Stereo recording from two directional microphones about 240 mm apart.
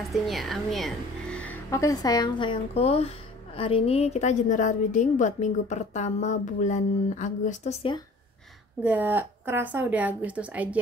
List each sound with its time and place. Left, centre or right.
0.1 s a woman's voice: centre; by 8.0 s left
8.8 s a woman's voice: centre